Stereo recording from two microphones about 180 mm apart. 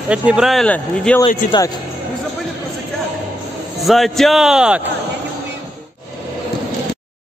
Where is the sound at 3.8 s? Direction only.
Centre (ahead or behind).